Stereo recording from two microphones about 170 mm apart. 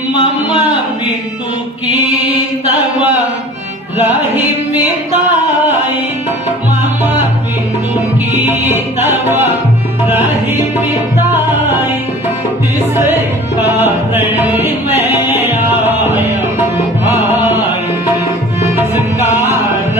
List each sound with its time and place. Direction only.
0.1 s speech: 30° left (ahead or behind)
7.0 s music: 10° right (ahead or behind)
8.4 s music: 10° right (ahead or behind)
13.6 s music: 10° right (ahead or behind)
18.8 s music: 15° right (ahead or behind)